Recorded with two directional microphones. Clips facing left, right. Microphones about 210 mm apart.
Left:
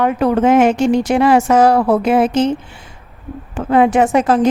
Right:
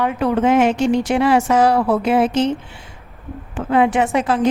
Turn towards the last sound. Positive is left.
turn(degrees=45)  # may be behind; listen again after turning